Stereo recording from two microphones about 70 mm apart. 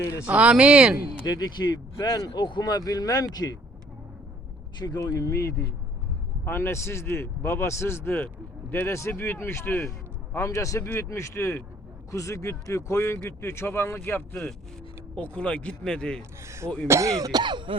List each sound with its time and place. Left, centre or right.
0.3 s speech: centre
1.2 s speech: left
5.0 s speech: left
6.4 s speech: left
15.1 s speech: centre
16.4 s speech: right
16.6 s speech: centre
16.9 s speech: right
17.3 s throat clearing: right